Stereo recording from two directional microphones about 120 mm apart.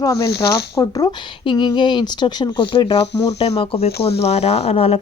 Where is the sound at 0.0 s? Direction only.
25° left (ahead or behind).